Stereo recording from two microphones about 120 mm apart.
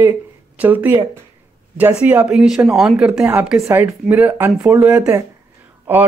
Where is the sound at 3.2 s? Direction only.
15° right (ahead or behind).